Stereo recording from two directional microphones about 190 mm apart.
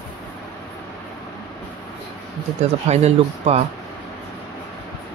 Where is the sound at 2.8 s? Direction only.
35° right (ahead or behind).